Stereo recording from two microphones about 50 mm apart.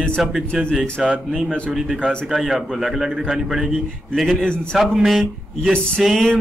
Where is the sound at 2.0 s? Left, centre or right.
Centre.